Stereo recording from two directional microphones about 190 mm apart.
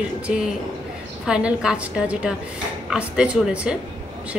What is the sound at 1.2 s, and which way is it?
A woman's voice, 5° right (ahead or behind).